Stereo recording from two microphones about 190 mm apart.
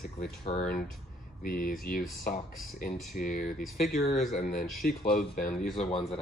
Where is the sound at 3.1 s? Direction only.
45° left (ahead or behind).